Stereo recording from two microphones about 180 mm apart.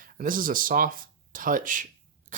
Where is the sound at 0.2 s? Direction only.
50° right (ahead or behind).